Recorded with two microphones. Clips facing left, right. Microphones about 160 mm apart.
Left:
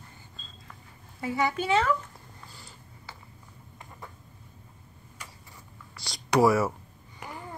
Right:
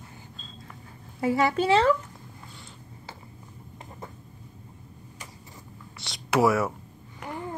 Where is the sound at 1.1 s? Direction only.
30° right (ahead or behind).